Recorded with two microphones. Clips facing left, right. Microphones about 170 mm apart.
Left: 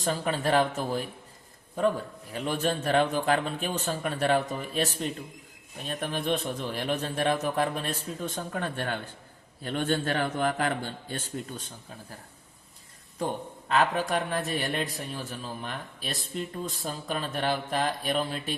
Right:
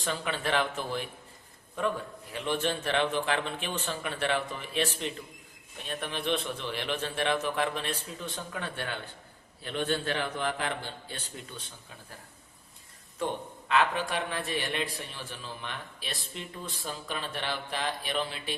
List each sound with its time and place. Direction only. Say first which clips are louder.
0.0 s a man's voice: left 4 dB; 40° left (ahead or behind)
2.3 s a man's voice: left 2 dB; 40° left (ahead or behind)
13.7 s a man's voice: left 2 dB; 40° left (ahead or behind)